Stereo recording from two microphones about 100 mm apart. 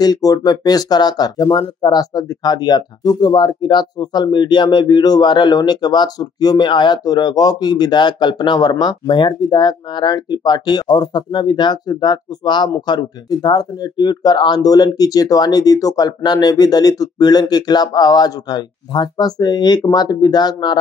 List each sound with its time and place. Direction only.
0.0 s speech: 40° left (ahead or behind)